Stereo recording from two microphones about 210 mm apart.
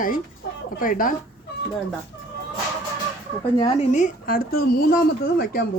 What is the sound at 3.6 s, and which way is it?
A woman's voice, 30° left (ahead or behind).